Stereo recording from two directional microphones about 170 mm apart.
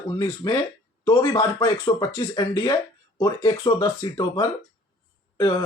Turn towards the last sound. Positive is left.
turn(degrees=25)  # may be behind; listen again after turning